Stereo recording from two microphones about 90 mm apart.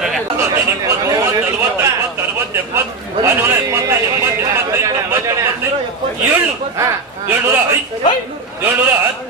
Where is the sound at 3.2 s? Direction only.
30° right (ahead or behind).